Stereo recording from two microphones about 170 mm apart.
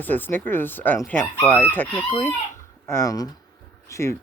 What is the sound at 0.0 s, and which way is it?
Speech, 10° left (ahead or behind).